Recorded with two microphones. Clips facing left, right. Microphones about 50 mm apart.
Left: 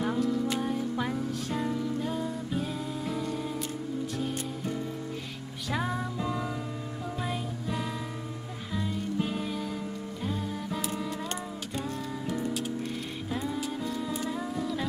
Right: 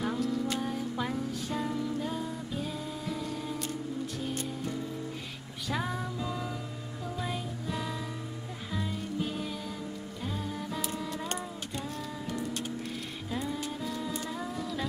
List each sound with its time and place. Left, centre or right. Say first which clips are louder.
0.0 s music: left 3 dB; centre
5.7 s music: left 2 dB; centre
6.1 s music: left 3 dB; left
7.2 s music: left 2 dB; centre
14.3 s humming: left 3 dB; centre